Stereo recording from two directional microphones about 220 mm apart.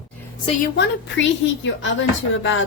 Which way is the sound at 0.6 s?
50° left (ahead or behind).